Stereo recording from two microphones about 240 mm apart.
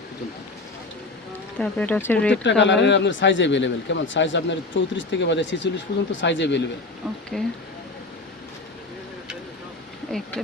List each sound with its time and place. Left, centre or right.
1.5 s speech: centre
2.4 s speech: left
7.3 s speech: centre
10.1 s speech: centre